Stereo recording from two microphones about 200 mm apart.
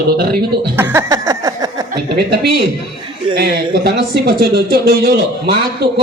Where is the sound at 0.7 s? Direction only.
10° right (ahead or behind).